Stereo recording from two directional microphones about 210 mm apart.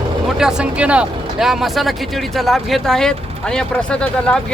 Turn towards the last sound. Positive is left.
turn(degrees=5)  # may be behind; listen again after turning